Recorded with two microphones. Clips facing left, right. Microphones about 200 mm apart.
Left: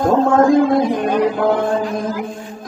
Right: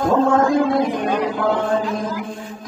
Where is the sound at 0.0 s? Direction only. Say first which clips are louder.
Left 3 dB; 50° left (ahead or behind).